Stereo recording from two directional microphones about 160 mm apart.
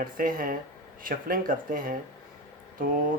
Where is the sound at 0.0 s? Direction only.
60° right (ahead or behind).